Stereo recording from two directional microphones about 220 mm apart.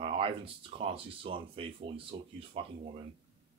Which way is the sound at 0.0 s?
25° right (ahead or behind).